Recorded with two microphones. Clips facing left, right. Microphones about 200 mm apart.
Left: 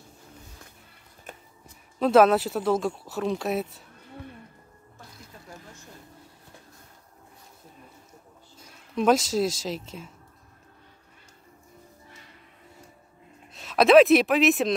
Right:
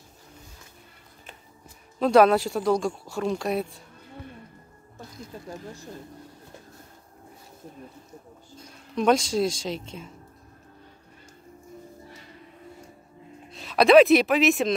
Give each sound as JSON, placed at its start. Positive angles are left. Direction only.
{"t": 2.0, "sound": "speech", "side_deg": 0}
{"t": 5.3, "sound": "a sound", "side_deg": -30}
{"t": 8.5, "sound": "speech", "side_deg": 5}
{"t": 13.5, "sound": "speech", "side_deg": 0}